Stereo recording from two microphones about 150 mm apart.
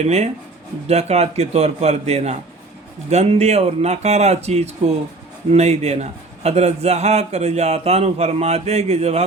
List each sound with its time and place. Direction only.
0.0 s a man's voice: 45° right (ahead or behind)